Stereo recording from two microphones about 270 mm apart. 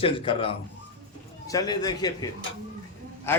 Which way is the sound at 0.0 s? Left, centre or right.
Centre.